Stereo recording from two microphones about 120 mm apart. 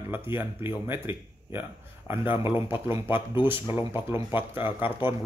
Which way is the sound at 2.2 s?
45° left (ahead or behind).